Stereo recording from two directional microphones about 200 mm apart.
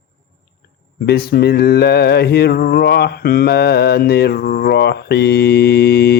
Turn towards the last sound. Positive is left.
turn(degrees=55)  # may be behind; listen again after turning